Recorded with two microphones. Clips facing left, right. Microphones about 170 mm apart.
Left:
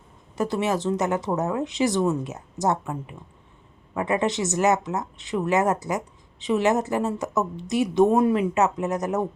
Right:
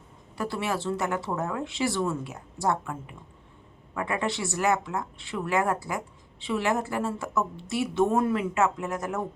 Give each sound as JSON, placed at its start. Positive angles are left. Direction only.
{"t": 0.3, "sound": "speech", "side_deg": 20}